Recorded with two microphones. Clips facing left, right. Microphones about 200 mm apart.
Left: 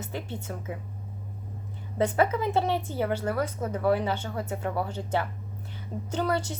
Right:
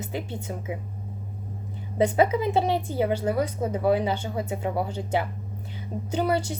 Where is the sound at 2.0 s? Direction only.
15° right (ahead or behind).